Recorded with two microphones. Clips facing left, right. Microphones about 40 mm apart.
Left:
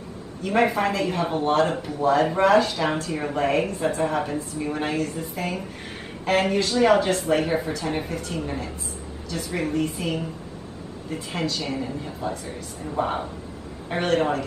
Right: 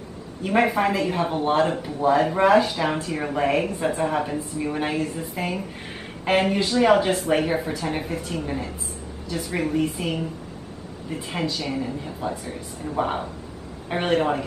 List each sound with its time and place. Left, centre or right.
0.4 s a woman's voice: centre
11.1 s a woman's voice: centre